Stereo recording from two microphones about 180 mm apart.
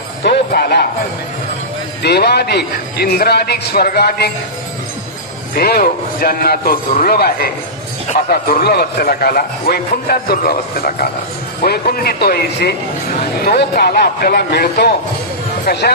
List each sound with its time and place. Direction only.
0.2 s a man's voice: 60° left (ahead or behind)
2.0 s a man's voice: 65° left (ahead or behind)
5.5 s a man's voice: 60° left (ahead or behind)